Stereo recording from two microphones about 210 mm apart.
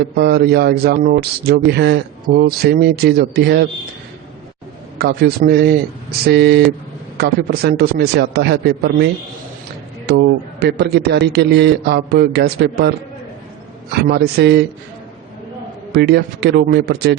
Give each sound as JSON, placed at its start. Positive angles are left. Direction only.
{"t": 0.2, "sound": "speech", "side_deg": -50}
{"t": 4.9, "sound": "speech", "side_deg": -50}
{"t": 10.1, "sound": "speech", "side_deg": -50}
{"t": 14.0, "sound": "speech", "side_deg": -50}
{"t": 15.9, "sound": "speech", "side_deg": -50}